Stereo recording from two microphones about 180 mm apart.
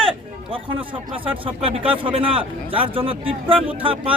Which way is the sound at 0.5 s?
30° right (ahead or behind).